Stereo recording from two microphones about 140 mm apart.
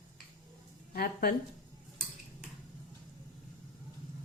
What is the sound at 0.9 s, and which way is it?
Speech, 90° left.